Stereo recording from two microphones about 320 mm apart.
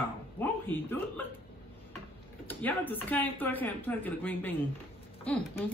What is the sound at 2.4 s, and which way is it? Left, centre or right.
Speech, centre.